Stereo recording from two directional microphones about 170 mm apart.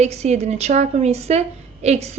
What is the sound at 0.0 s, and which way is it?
A woman's voice, 40° right (ahead or behind).